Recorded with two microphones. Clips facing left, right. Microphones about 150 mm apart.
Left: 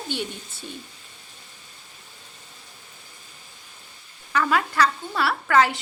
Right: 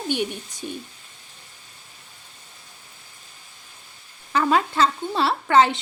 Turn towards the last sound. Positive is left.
turn(degrees=-25)  # may be behind; listen again after turning